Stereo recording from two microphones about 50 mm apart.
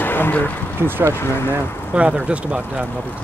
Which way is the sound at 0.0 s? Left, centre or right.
Left.